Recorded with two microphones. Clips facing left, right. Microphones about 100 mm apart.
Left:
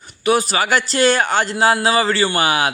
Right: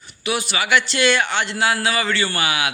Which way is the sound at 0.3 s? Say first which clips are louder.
Left 5 dB; 40° left (ahead or behind).